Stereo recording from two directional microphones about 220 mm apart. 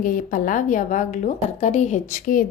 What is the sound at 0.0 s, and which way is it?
A woman's voice, 40° left (ahead or behind).